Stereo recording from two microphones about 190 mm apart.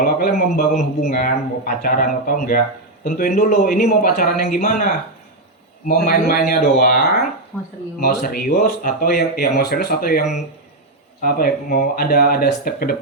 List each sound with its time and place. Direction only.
0.0 s a man's voice: 45° left (ahead or behind)
5.9 s a man's voice: 50° left (ahead or behind)
7.5 s speech: 5° left (ahead or behind)
8.0 s a man's voice: 50° left (ahead or behind)